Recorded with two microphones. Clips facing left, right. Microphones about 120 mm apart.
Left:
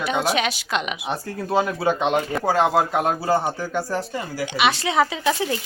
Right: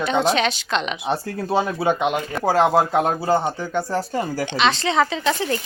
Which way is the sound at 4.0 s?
40° right (ahead or behind).